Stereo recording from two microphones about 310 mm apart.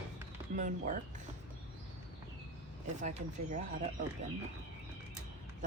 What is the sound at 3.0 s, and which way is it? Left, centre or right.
Speech, right.